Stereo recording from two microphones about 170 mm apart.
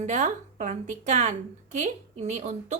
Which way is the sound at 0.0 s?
45° right (ahead or behind).